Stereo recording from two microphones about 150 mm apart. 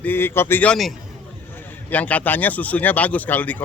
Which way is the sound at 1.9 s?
10° left (ahead or behind).